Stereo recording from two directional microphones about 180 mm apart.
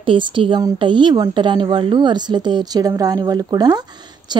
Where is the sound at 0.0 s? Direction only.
30° right (ahead or behind).